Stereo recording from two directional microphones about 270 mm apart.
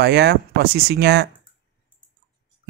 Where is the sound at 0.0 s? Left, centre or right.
Right.